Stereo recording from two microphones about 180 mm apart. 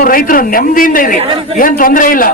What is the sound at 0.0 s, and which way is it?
A man's voice, 50° left (ahead or behind).